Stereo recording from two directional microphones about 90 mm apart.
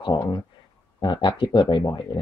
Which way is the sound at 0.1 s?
55° left (ahead or behind).